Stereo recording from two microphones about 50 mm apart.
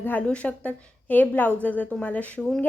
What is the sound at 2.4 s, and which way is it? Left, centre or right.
Speech, centre.